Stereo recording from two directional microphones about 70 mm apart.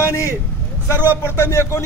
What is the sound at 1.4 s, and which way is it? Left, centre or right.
Speech, left.